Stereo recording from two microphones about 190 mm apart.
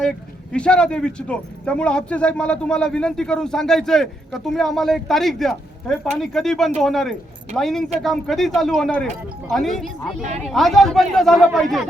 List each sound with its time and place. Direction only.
0.5 s speech: 5° left (ahead or behind)